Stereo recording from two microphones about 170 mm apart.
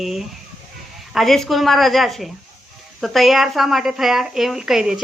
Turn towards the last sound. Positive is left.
turn(degrees=0)  # may be behind; listen again after turning